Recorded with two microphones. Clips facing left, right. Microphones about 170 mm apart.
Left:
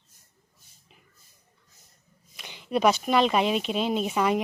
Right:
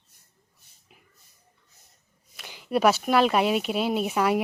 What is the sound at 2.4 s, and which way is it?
Speech, 5° right (ahead or behind).